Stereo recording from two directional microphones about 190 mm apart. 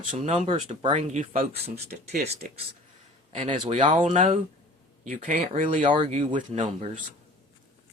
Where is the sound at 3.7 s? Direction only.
40° right (ahead or behind).